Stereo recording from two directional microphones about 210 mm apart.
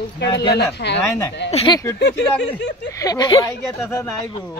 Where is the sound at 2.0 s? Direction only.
55° left (ahead or behind).